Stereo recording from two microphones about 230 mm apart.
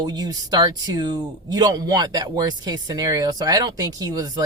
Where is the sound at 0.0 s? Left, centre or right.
Centre.